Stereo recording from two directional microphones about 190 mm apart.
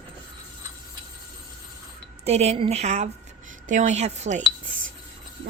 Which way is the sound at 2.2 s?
35° right (ahead or behind).